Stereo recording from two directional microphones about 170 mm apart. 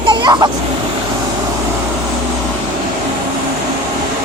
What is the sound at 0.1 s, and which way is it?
Vehicle, 25° right (ahead or behind).